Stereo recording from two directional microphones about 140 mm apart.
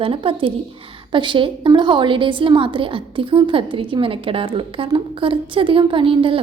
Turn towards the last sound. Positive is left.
turn(degrees=-40)  # may be behind; listen again after turning